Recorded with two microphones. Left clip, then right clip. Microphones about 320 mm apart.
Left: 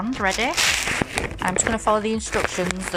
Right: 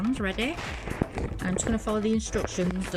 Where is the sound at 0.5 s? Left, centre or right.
Left.